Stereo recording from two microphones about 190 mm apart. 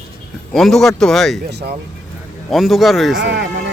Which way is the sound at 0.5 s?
Centre (ahead or behind).